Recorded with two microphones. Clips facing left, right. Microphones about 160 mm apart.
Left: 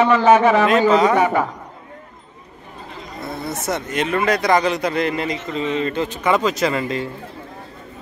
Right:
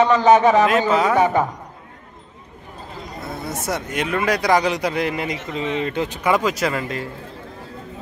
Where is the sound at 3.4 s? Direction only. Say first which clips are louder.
Left 1 dB; 10° right (ahead or behind).